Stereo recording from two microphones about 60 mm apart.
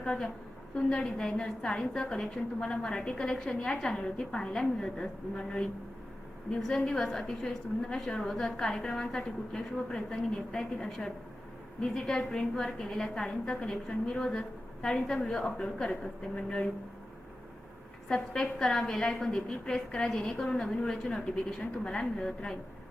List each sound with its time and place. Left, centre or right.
0.0 s a woman's voice: centre
18.1 s a woman's voice: centre